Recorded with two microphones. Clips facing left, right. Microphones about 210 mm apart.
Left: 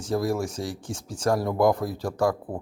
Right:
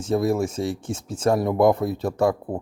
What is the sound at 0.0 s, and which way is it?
Speech, 25° right (ahead or behind).